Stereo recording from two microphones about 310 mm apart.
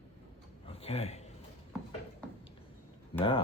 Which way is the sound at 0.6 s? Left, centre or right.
Centre.